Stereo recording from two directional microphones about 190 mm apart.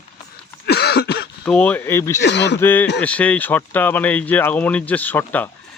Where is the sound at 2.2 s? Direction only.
65° left (ahead or behind).